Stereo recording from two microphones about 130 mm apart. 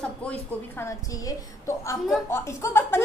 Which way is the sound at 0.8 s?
25° left (ahead or behind).